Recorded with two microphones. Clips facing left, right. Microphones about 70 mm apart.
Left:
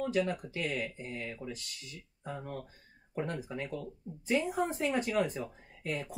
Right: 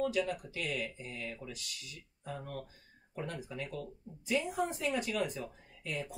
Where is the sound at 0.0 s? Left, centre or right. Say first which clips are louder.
Left 2 dB; left.